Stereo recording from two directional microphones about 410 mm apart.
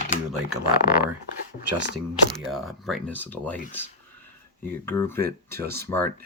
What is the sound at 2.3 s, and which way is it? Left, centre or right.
Speech, centre.